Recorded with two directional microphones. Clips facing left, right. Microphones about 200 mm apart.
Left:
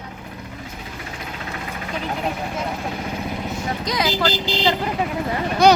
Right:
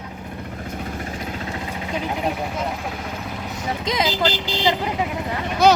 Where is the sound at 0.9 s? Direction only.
45° right (ahead or behind).